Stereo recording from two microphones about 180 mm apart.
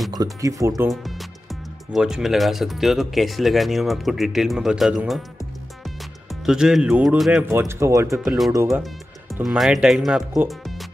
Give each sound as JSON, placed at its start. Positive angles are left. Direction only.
{"t": 0.1, "sound": "speech", "side_deg": -20}
{"t": 0.8, "sound": "speech", "side_deg": 0}
{"t": 6.4, "sound": "speech", "side_deg": -5}
{"t": 8.2, "sound": "speech", "side_deg": 0}
{"t": 10.5, "sound": "music", "side_deg": 0}